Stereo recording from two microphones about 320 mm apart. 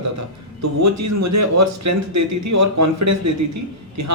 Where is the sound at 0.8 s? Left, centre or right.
Right.